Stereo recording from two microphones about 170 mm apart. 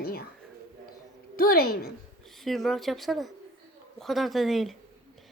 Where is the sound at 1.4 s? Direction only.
60° left (ahead or behind).